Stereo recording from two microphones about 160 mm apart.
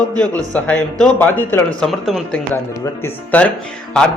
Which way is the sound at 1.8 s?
Centre (ahead or behind).